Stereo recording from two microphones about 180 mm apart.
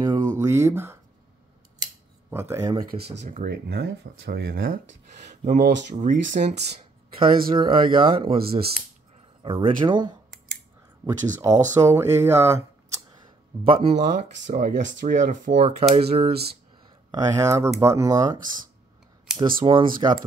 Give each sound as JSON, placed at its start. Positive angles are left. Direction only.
{"t": 0.0, "sound": "a sound", "side_deg": -20}
{"t": 2.3, "sound": "speech", "side_deg": -15}
{"t": 2.9, "sound": "speech", "side_deg": -30}
{"t": 3.3, "sound": "speech", "side_deg": -55}
{"t": 5.4, "sound": "speech", "side_deg": -40}
{"t": 7.2, "sound": "speech", "side_deg": -30}
{"t": 11.0, "sound": "speech", "side_deg": -15}
{"t": 13.7, "sound": "speech", "side_deg": -35}
{"t": 17.1, "sound": "speech", "side_deg": -15}
{"t": 19.3, "sound": "a sound", "side_deg": -5}
{"t": 19.6, "sound": "speech", "side_deg": -30}